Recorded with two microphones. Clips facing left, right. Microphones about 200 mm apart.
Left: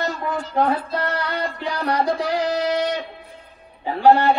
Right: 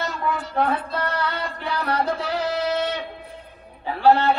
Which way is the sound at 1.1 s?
15° left (ahead or behind).